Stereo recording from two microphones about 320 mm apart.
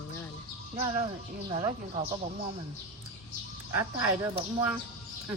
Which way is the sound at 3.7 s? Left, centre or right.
Centre.